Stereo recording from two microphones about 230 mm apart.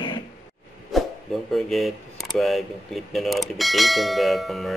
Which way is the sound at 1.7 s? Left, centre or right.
Centre.